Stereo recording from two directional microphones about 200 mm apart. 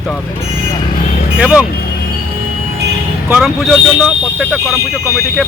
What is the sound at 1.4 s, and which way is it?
Speech, 5° right (ahead or behind).